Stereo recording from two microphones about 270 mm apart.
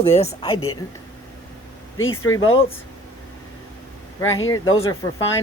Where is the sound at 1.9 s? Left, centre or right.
Left.